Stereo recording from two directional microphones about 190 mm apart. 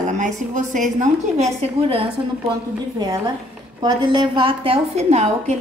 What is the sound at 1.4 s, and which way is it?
Speech, 30° right (ahead or behind).